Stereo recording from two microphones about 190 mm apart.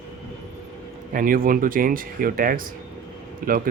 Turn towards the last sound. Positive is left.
turn(degrees=-45)  # may be behind; listen again after turning